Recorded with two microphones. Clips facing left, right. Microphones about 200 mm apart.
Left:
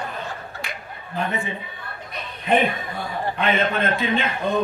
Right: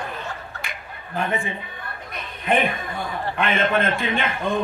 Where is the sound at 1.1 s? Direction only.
50° right (ahead or behind).